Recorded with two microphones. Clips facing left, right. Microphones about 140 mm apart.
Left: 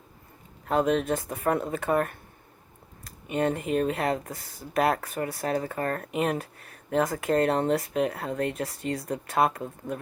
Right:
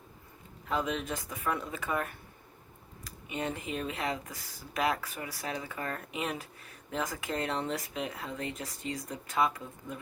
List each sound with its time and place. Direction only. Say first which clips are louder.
0.6 s speech: left 9 dB; 50° left (ahead or behind)
3.2 s speech: left 9 dB; 50° left (ahead or behind)